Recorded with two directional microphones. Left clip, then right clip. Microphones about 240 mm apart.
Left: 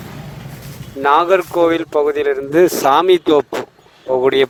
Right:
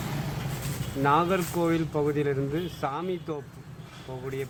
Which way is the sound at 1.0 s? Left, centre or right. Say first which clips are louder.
Left 12 dB; left.